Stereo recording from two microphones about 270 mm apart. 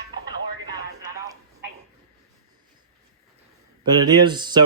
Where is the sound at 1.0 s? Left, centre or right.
Centre.